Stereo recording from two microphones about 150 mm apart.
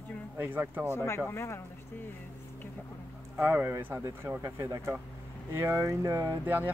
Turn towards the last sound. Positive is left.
turn(degrees=-15)  # may be behind; listen again after turning